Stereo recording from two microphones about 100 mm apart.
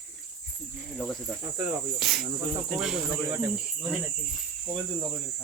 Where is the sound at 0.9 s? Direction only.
5° left (ahead or behind).